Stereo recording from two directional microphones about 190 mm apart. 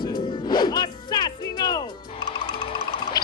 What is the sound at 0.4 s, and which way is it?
Music, 25° left (ahead or behind).